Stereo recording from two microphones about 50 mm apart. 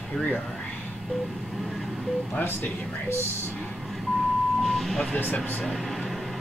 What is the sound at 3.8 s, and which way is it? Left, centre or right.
Vehicle, centre.